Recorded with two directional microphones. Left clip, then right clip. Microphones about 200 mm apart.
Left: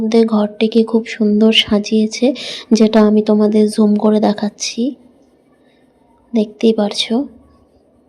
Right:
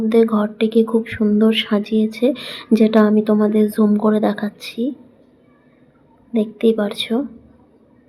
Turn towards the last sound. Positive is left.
turn(degrees=25)  # may be behind; listen again after turning